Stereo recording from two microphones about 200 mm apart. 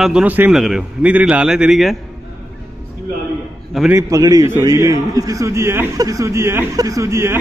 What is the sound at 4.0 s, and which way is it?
A man's voice, 15° right (ahead or behind).